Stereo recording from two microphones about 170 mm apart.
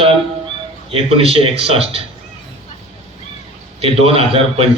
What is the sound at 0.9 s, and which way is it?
A man's voice, 35° right (ahead or behind).